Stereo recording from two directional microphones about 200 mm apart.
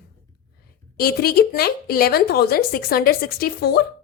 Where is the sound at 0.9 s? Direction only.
50° left (ahead or behind).